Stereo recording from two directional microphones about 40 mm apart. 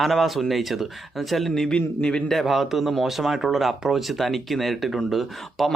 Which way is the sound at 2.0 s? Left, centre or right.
Left.